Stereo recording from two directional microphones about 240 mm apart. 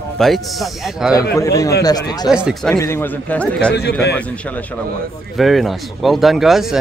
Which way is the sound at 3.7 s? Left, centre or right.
Left.